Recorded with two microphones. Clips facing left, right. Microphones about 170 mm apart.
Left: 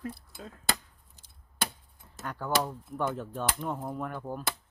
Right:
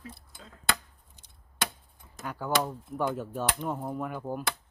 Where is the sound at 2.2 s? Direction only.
5° right (ahead or behind).